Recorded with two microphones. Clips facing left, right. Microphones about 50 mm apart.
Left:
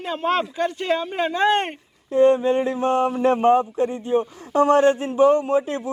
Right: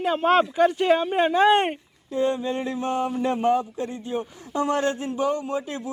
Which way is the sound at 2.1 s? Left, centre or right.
Left.